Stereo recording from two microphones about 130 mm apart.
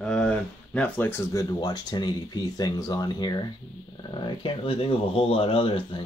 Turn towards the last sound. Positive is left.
turn(degrees=40)  # may be behind; listen again after turning